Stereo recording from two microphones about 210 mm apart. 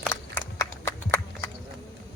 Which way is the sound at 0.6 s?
10° left (ahead or behind).